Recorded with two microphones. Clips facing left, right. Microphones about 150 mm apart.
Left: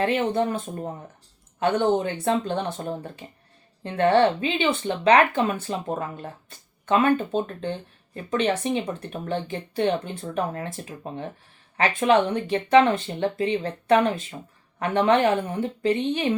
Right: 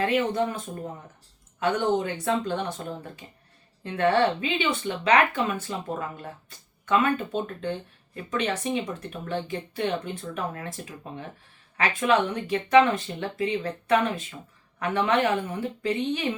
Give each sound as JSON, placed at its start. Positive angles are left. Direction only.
{"t": 0.0, "sound": "speech", "side_deg": 30}